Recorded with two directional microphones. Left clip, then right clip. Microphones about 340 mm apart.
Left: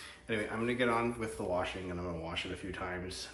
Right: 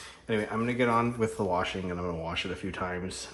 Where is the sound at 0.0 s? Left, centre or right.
Centre.